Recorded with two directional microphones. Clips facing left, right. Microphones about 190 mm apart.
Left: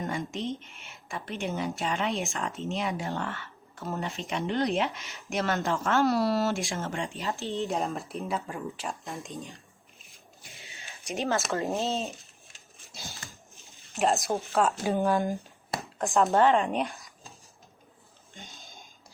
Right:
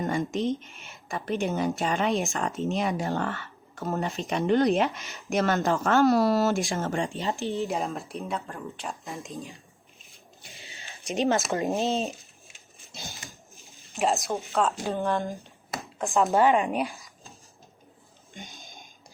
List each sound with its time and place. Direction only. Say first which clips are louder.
0.1 s a woman's voice: right 6 dB; 40° right (ahead or behind)
7.2 s speech: right 4 dB; 20° right (ahead or behind)
7.5 s speech: right 1 dB; centre (ahead or behind)
11.0 s speech: right 4 dB; 20° right (ahead or behind)
12.9 s a sound: right 2 dB; 20° right (ahead or behind)
13.8 s speech: even; centre (ahead or behind)
16.4 s speech: right 1 dB; 15° right (ahead or behind)
18.3 s a sound: right 4 dB; 15° right (ahead or behind)